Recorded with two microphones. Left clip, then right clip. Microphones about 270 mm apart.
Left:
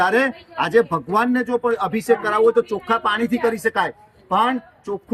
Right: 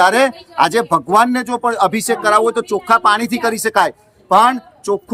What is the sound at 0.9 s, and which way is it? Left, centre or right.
Speech, right.